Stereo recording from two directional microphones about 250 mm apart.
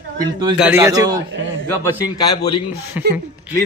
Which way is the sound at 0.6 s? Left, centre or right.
Centre.